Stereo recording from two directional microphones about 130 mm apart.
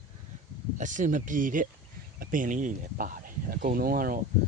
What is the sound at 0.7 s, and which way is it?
Speech, 75° right (ahead or behind).